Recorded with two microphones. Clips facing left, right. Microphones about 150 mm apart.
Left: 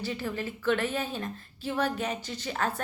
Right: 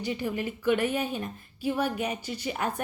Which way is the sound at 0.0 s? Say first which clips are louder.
Right 2 dB; 15° right (ahead or behind).